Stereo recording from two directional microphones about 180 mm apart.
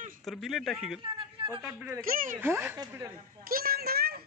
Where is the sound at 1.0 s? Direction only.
30° right (ahead or behind).